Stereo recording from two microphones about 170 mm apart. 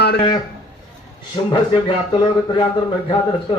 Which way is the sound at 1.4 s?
25° left (ahead or behind).